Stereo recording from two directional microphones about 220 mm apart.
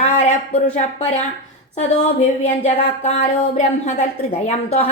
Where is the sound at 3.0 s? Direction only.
30° left (ahead or behind).